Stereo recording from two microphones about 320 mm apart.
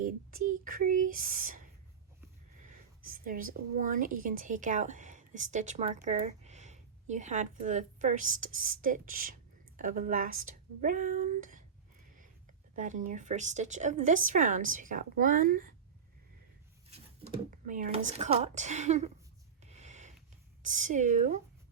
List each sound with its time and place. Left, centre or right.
0.0 s speech: right
3.0 s a woman's voice: right
12.7 s a woman's voice: right
16.9 s a woman's voice: right
19.7 s a sound: right
20.6 s a woman's voice: right